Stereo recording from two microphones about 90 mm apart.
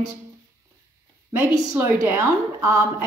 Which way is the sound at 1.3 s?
30° right (ahead or behind).